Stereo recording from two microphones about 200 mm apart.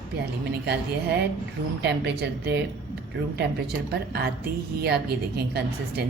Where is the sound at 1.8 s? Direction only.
60° right (ahead or behind).